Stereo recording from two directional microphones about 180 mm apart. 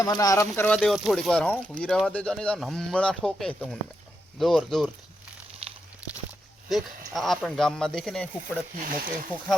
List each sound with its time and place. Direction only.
0.0 s speech: 20° left (ahead or behind)
0.8 s speech: centre (ahead or behind)
7.1 s speech: centre (ahead or behind)
8.8 s speech: 50° right (ahead or behind)